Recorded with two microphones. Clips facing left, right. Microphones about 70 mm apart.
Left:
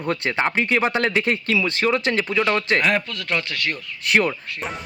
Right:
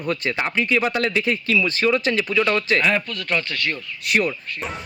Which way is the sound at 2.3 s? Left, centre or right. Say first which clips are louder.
Right 1 dB; centre.